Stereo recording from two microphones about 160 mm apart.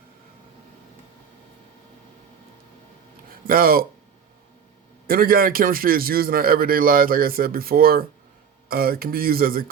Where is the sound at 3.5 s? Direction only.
65° right (ahead or behind).